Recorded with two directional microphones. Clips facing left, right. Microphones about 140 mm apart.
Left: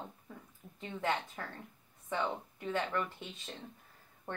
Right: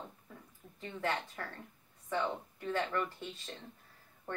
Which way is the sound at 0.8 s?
20° left (ahead or behind).